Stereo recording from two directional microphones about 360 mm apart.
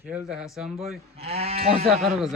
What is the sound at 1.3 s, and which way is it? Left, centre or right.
Speech, centre.